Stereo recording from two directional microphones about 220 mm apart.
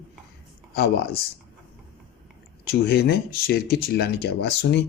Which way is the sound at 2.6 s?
45° left (ahead or behind).